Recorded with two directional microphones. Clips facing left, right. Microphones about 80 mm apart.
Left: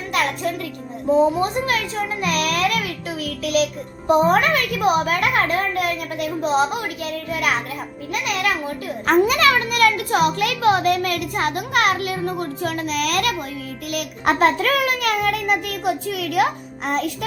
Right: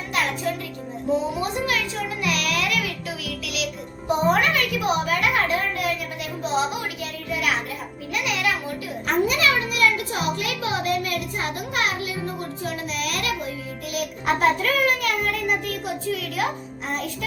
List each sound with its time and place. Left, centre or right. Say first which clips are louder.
1.4 s a child's voice: left 4 dB; left
4.1 s a child's voice: left 4 dB; left
9.0 s a child's voice: left 5 dB; left
12.6 s a child's voice: left 6 dB; left